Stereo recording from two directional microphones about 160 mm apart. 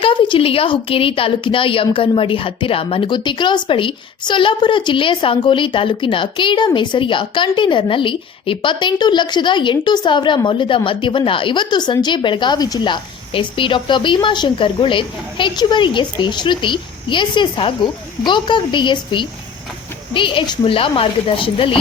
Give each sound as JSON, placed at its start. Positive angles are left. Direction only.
{"t": 0.0, "sound": "a woman's voice", "side_deg": 30}